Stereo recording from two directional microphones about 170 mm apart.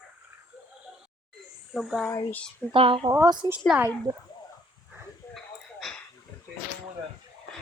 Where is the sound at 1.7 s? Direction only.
Centre (ahead or behind).